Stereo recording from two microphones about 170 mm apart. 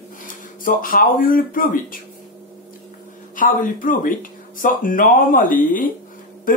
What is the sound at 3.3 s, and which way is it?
Speech, 55° left (ahead or behind).